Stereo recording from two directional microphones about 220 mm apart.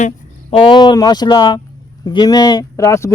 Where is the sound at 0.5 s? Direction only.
20° left (ahead or behind).